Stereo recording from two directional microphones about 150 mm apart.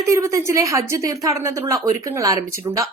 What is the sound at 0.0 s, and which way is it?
A woman's voice, 20° right (ahead or behind).